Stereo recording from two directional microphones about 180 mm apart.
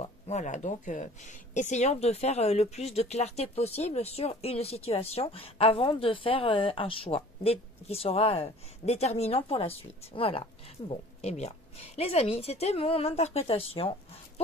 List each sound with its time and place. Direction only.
0.0 s speech: 40° left (ahead or behind)